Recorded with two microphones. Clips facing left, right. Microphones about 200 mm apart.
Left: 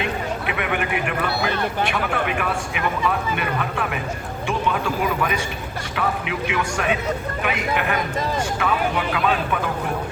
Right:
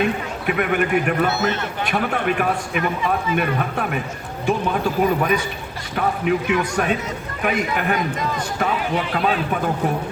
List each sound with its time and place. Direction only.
0.4 s a man's voice: 45° right (ahead or behind)